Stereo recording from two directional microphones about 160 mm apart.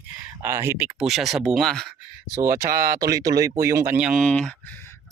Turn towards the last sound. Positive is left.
turn(degrees=5)  # may be behind; listen again after turning